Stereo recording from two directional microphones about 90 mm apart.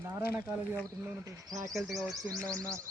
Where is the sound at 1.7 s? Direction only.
Centre (ahead or behind).